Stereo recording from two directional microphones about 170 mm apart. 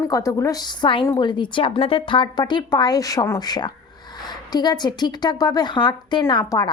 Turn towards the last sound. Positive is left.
turn(degrees=20)  # may be behind; listen again after turning